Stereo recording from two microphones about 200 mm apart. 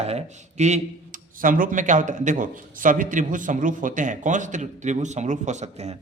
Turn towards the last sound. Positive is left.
turn(degrees=-35)  # may be behind; listen again after turning